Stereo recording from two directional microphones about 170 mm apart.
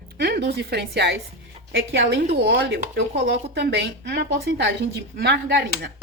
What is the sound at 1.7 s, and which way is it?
A woman's voice, 90° right.